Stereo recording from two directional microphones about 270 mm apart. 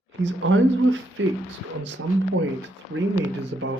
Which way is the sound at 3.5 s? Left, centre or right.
Right.